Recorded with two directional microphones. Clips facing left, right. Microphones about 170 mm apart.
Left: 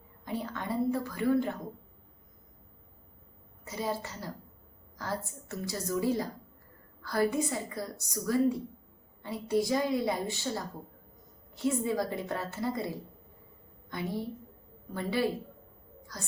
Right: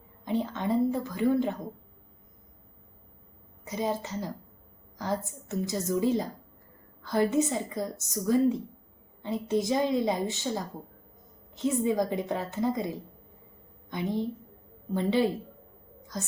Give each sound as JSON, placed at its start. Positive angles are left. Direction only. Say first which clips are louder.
{"t": 0.3, "sound": "a woman's voice", "louder": "right 6 dB", "side_deg": -20}
{"t": 3.6, "sound": "a woman's voice", "louder": "right 4 dB", "side_deg": -20}